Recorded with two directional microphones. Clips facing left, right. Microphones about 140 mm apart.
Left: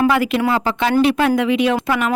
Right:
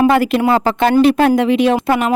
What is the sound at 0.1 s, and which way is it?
Speech, 40° right (ahead or behind).